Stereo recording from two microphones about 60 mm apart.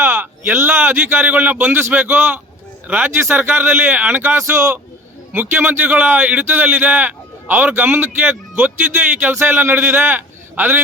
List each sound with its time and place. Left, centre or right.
0.0 s a sound: right
0.8 s a man's voice: right
4.4 s a man's voice: right
5.3 s a man's voice: right